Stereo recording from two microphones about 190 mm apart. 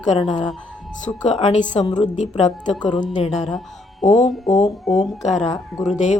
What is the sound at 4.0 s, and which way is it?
Speech, 40° left (ahead or behind).